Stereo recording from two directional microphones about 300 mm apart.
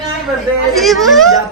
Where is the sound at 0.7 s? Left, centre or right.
Centre.